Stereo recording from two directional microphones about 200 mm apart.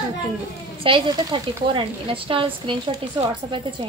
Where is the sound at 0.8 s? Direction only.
25° right (ahead or behind).